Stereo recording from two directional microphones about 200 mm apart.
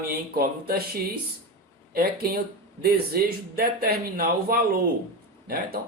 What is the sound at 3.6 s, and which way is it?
Speech, 50° right (ahead or behind).